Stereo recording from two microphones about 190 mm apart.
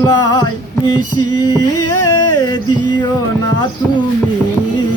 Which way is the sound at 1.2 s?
20° left (ahead or behind).